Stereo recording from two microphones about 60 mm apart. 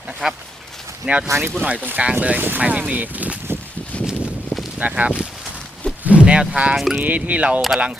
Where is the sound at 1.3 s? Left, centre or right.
Right.